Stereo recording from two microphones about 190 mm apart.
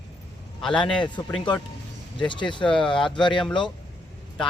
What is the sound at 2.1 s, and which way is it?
Speech, 25° left (ahead or behind).